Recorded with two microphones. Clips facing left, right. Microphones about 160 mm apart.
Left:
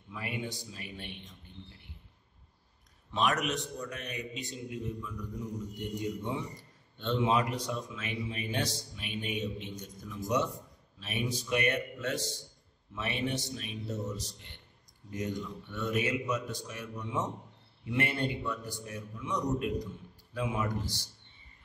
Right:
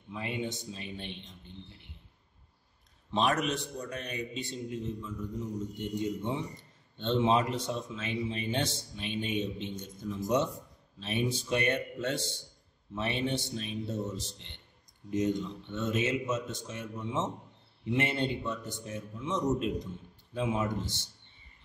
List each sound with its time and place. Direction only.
0.1 s a man's voice: 25° right (ahead or behind)
3.1 s a man's voice: 30° right (ahead or behind)
5.8 s a man's voice: 25° right (ahead or behind)